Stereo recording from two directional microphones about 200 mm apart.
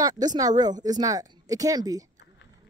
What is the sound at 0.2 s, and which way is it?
Speech, 20° right (ahead or behind).